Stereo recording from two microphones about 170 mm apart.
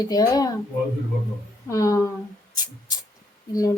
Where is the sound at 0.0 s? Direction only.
20° left (ahead or behind).